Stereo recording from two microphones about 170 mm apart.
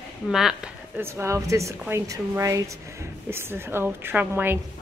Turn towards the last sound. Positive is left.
turn(degrees=-10)  # may be behind; listen again after turning